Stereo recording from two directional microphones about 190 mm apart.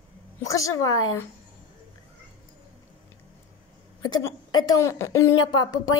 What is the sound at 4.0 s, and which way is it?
A woman's voice, 20° left (ahead or behind).